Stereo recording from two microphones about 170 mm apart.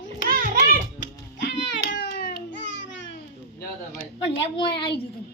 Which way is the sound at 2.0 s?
90° left.